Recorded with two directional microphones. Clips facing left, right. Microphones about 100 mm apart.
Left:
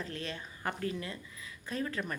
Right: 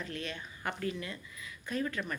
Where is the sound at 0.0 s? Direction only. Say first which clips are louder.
Even; 35° left (ahead or behind).